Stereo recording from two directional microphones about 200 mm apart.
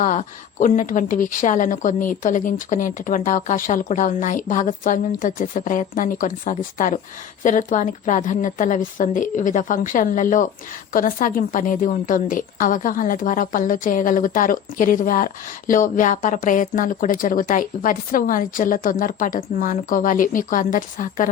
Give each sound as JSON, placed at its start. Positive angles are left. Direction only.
{"t": 0.0, "sound": "a woman's voice", "side_deg": 40}